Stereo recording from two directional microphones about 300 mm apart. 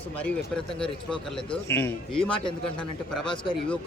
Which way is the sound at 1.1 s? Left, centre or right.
Centre.